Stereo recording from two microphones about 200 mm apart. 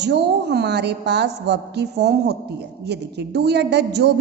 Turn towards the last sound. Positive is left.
turn(degrees=-55)  # may be behind; listen again after turning